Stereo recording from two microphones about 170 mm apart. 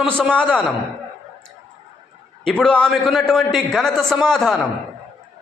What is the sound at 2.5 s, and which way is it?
A man's voice, 5° left (ahead or behind).